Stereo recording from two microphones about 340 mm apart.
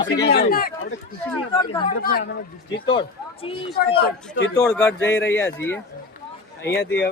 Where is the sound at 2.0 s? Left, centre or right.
Left.